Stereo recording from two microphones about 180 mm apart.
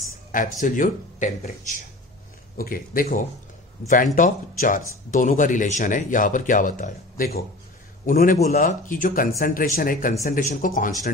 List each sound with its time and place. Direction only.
0.3 s speech: 45° left (ahead or behind)